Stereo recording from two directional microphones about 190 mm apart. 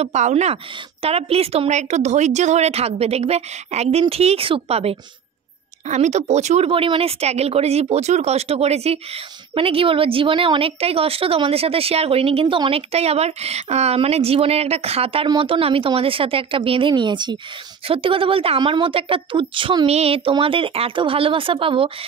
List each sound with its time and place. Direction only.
0.0 s a woman's voice: 35° right (ahead or behind)